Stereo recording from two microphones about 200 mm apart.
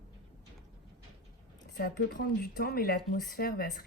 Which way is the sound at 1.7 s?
55° left (ahead or behind).